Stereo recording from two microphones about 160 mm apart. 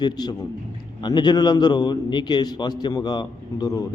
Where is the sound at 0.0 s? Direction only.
25° left (ahead or behind).